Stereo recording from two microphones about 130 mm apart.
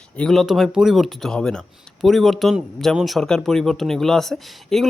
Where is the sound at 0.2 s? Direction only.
5° left (ahead or behind).